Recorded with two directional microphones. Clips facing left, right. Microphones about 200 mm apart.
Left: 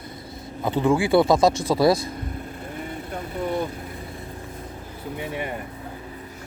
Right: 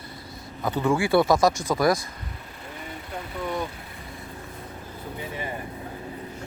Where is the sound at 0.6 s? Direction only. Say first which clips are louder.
Left 3 dB; 20° left (ahead or behind).